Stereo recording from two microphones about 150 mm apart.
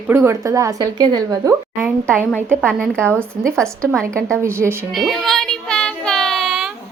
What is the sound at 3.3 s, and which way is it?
Speech, 15° right (ahead or behind).